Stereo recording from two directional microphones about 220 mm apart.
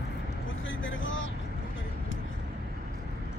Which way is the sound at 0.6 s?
60° left (ahead or behind).